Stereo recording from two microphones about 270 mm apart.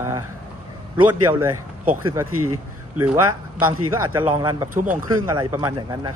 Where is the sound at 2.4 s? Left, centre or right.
Right.